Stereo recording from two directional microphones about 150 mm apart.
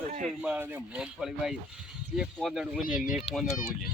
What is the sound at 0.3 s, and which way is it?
Speech, 10° right (ahead or behind).